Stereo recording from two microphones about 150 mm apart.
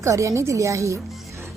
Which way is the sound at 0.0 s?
20° right (ahead or behind).